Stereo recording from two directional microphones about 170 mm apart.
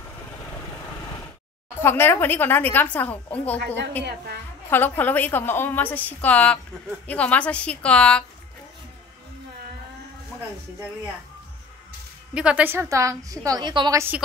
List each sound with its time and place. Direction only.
1.8 s a woman's voice: 15° left (ahead or behind)
3.5 s a woman's voice: 90° right
4.6 s a woman's voice: 10° left (ahead or behind)
12.4 s a woman's voice: 5° right (ahead or behind); by 14.0 s 25° right (ahead or behind)